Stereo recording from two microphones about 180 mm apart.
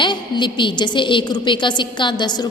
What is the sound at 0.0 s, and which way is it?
A woman's voice, 25° left (ahead or behind).